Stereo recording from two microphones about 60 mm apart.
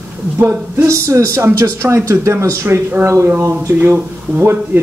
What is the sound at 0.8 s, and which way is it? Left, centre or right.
Speech, right.